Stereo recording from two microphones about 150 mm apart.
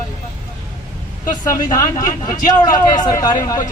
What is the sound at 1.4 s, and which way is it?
A man's voice, 25° left (ahead or behind).